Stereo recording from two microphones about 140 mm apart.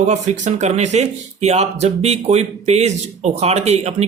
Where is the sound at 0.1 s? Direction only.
55° right (ahead or behind).